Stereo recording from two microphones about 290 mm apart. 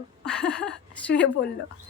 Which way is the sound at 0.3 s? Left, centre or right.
Centre.